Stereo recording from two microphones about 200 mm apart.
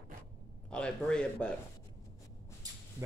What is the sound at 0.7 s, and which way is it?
Speech, 5° left (ahead or behind).